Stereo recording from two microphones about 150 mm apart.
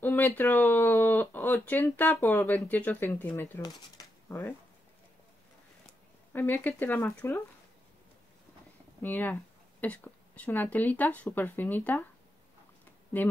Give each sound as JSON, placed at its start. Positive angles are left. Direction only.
{"t": 0.0, "sound": "speech", "side_deg": 15}
{"t": 3.6, "sound": "speech", "side_deg": 25}
{"t": 6.3, "sound": "speech", "side_deg": 10}
{"t": 9.0, "sound": "a woman's voice", "side_deg": 10}
{"t": 13.2, "sound": "speech", "side_deg": 10}